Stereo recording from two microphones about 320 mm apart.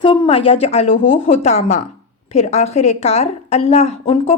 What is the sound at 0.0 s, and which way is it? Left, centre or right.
A woman's voice, centre.